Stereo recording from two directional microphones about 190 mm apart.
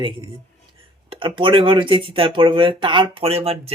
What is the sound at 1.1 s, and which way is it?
Speech, 25° right (ahead or behind).